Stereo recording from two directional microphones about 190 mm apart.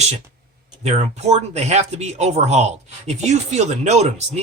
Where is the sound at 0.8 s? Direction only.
35° right (ahead or behind).